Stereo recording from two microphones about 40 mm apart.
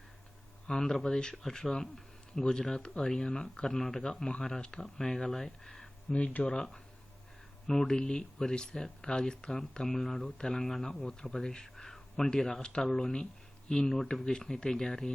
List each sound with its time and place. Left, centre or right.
0.7 s speech: centre
5.5 s a sound: centre
6.1 s speech: left
7.7 s speech: centre